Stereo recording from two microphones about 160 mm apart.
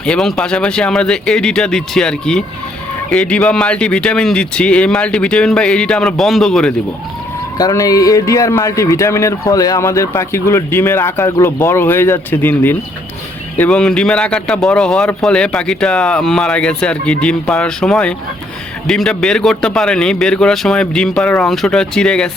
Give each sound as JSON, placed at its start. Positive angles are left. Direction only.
{"t": 0.0, "sound": "a man's voice", "side_deg": 5}
{"t": 7.6, "sound": "a man's voice", "side_deg": 20}